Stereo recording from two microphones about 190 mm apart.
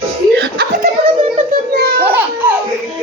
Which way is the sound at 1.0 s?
35° right (ahead or behind).